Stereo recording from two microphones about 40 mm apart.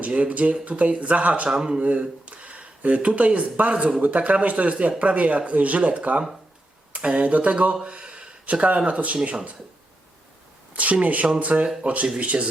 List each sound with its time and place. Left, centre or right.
0.0 s speech: right
1.5 s speech: right
1.8 s speech: right
10.8 s speech: right